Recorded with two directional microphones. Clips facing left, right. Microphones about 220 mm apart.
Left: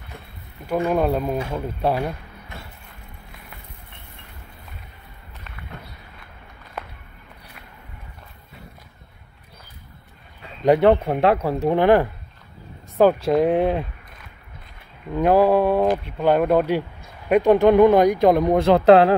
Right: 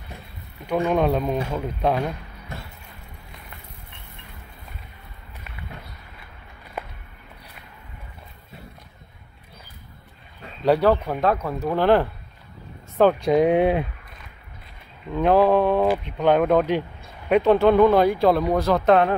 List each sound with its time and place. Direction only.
0.7 s speech: 5° left (ahead or behind)
10.6 s speech: 20° left (ahead or behind)
11.7 s speech: 15° left (ahead or behind); by 13.8 s 5° right (ahead or behind)
15.1 s speech: 10° left (ahead or behind); by 19.1 s 30° left (ahead or behind)